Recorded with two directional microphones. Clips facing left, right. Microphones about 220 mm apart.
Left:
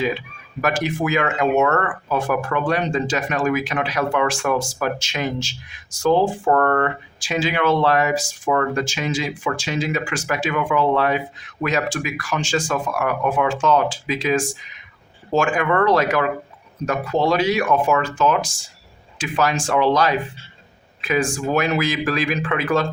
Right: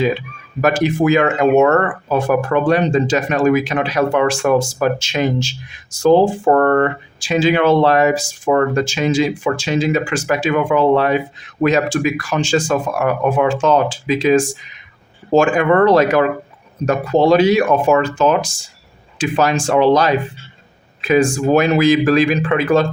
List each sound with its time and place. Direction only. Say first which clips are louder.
0.6 s speech: right 7 dB; 25° right (ahead or behind)